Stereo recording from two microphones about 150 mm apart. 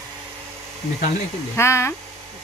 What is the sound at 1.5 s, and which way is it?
Speech, 20° left (ahead or behind).